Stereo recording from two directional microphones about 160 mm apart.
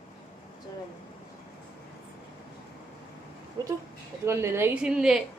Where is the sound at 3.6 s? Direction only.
20° right (ahead or behind); by 5.2 s 5° right (ahead or behind).